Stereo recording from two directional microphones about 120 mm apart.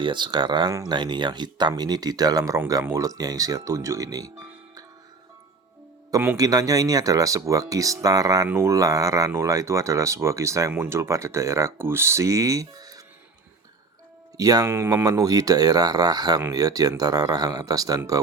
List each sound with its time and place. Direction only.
0.0 s speech: 40° right (ahead or behind)
6.3 s speech: 30° right (ahead or behind)
14.3 s speech: 30° right (ahead or behind)